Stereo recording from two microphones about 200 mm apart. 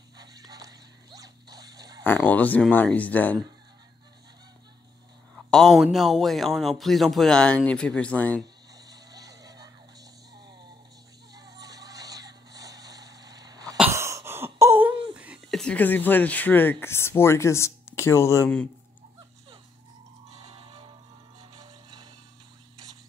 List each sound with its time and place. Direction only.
0.2 s dog: 20° right (ahead or behind)
2.0 s speech: 5° left (ahead or behind)
5.5 s speech: centre (ahead or behind)
8.7 s a sound: 20° right (ahead or behind)
11.3 s music: 20° right (ahead or behind)
13.7 s wail: 15° right (ahead or behind)
15.1 s a sound: 5° right (ahead or behind)
16.8 s speech: 15° left (ahead or behind)
20.2 s music: 30° right (ahead or behind)